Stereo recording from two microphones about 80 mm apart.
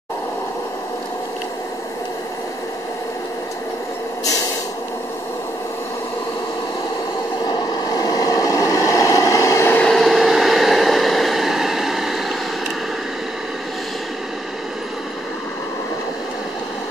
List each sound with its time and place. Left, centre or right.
7.4 s vehicle: left
9.8 s vehicle: centre